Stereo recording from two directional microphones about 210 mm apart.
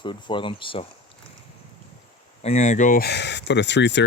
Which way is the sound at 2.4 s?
30° left (ahead or behind).